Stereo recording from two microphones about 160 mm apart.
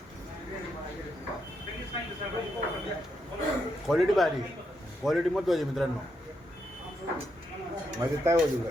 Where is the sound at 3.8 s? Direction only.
Centre (ahead or behind).